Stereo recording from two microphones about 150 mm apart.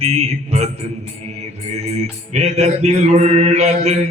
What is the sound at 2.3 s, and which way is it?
Mantra, 45° right (ahead or behind).